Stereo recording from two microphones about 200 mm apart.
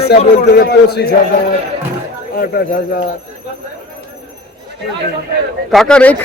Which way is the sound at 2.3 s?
45° left (ahead or behind).